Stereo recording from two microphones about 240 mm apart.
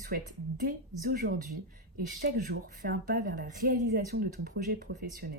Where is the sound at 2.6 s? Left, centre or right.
Right.